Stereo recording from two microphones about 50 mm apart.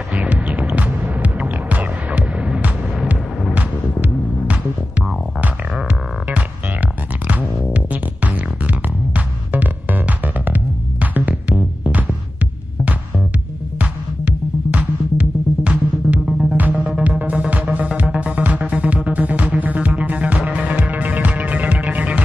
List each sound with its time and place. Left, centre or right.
0.1 s music: right
7.2 s music: right
13.7 s music: right
16.3 s music: centre
16.5 s music: right